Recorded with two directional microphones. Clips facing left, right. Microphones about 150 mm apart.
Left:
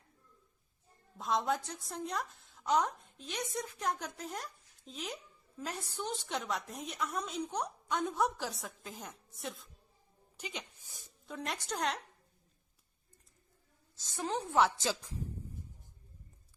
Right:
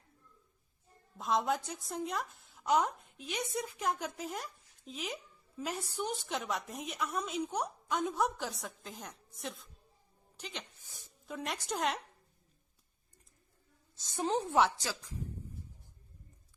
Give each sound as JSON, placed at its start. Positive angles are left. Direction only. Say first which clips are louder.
{"t": 1.2, "sound": "a woman's voice", "louder": "right 1 dB", "side_deg": 0}
{"t": 11.0, "sound": "speech", "louder": "right 1 dB", "side_deg": 0}
{"t": 14.3, "sound": "a woman's voice", "louder": "right 4 dB", "side_deg": -25}
{"t": 14.8, "sound": "speech", "louder": "left 5 dB", "side_deg": 25}